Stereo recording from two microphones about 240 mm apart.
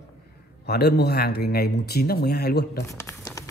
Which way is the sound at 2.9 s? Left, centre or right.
Centre.